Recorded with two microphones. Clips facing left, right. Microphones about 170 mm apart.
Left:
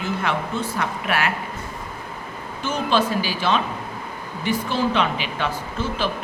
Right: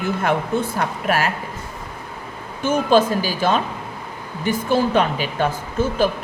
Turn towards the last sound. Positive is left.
turn(degrees=-45)  # may be behind; listen again after turning